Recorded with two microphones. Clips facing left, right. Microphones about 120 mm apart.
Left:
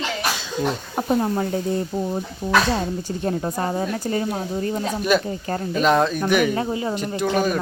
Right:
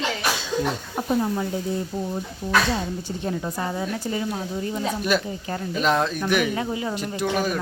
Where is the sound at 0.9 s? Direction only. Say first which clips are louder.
Left 3 dB; 55° left (ahead or behind).